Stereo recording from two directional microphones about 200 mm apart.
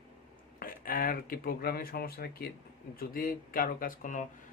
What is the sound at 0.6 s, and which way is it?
Speech, 45° left (ahead or behind).